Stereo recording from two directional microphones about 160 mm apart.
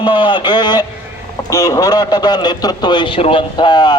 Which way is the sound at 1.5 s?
20° left (ahead or behind).